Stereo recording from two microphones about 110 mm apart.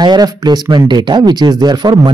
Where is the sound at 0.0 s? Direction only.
40° right (ahead or behind).